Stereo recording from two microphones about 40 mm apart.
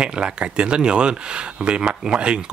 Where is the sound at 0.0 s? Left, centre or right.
Right.